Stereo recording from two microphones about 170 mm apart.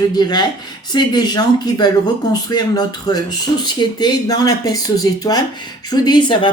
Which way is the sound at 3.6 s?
25° left (ahead or behind).